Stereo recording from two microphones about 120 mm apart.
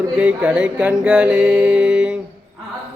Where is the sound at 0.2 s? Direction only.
10° right (ahead or behind).